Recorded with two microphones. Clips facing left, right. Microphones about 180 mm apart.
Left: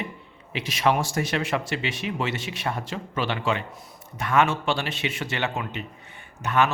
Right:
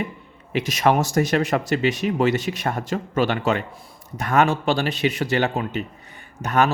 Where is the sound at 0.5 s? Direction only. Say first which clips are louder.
Right 4 dB; 45° right (ahead or behind).